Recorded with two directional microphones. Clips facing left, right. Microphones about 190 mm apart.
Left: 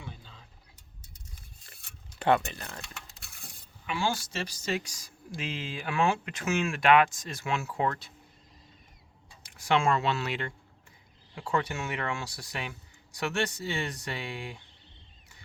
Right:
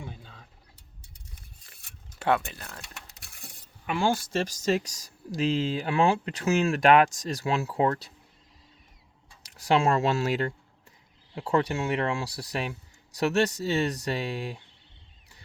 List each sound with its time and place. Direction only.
0.0 s a sound: 50° right (ahead or behind)
2.1 s speech: 5° right (ahead or behind)
3.8 s speech: 55° right (ahead or behind); by 8.1 s 35° right (ahead or behind)
9.4 s speech: 35° right (ahead or behind)